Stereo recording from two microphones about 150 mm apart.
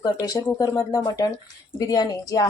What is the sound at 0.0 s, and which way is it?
Speech, 25° left (ahead or behind).